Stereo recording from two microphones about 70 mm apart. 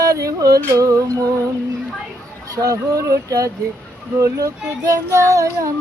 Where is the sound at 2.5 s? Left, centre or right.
Right.